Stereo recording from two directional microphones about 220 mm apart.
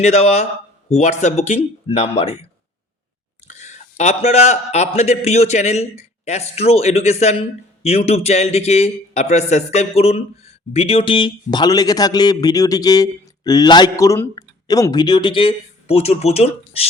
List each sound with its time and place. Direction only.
0.0 s a man's voice: 30° left (ahead or behind)
3.5 s a man's voice: 30° left (ahead or behind)